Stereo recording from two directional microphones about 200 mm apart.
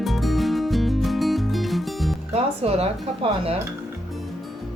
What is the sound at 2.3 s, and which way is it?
Speech, 30° right (ahead or behind).